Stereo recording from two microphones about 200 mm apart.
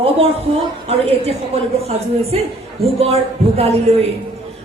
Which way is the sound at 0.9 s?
30° right (ahead or behind).